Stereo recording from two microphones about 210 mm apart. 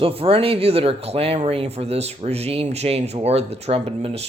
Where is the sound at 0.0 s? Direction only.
25° right (ahead or behind).